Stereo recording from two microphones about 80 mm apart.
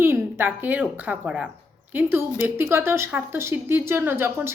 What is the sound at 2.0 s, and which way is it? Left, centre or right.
A woman's voice, right.